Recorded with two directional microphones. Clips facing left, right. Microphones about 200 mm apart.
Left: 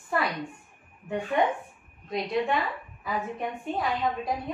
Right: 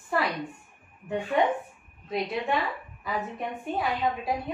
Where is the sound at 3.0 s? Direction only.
Centre (ahead or behind).